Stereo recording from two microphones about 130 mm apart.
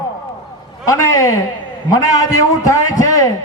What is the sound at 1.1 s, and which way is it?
A man's voice, 25° left (ahead or behind).